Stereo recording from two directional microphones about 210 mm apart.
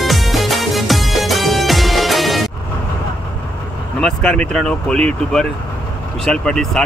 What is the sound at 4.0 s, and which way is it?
Speech, 5° left (ahead or behind).